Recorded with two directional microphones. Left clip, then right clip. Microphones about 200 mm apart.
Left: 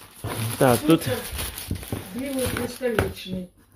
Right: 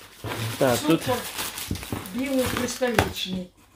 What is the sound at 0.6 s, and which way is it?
Speech, 30° left (ahead or behind).